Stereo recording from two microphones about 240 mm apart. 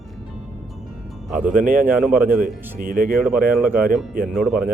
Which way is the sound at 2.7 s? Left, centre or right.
Right.